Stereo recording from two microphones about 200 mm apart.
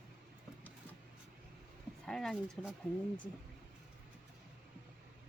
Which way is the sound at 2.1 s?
Centre (ahead or behind).